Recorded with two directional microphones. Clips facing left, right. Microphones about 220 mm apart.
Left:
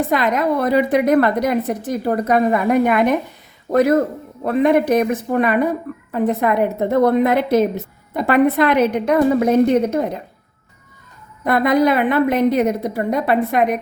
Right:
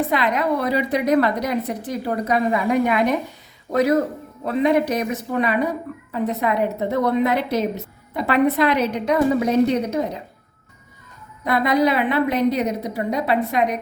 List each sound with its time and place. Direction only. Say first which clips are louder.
0.1 s speech: left 3 dB; 45° left (ahead or behind)
11.4 s speech: left 3 dB; 50° left (ahead or behind)